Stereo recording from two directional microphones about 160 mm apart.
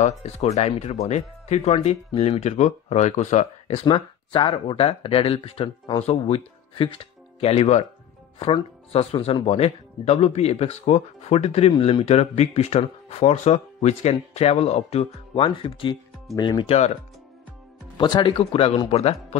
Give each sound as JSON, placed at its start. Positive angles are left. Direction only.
{"t": 0.2, "sound": "speech", "side_deg": 40}
{"t": 3.8, "sound": "speech", "side_deg": 30}
{"t": 17.9, "sound": "speech", "side_deg": 30}
{"t": 18.4, "sound": "speech", "side_deg": 40}